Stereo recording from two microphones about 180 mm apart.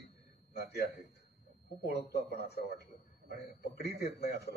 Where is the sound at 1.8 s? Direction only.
65° left (ahead or behind).